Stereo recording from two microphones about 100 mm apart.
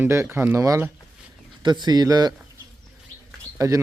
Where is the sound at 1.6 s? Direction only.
45° right (ahead or behind).